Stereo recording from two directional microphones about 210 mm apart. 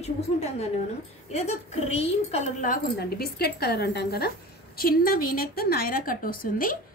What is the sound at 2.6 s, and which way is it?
A woman's voice, 45° left (ahead or behind).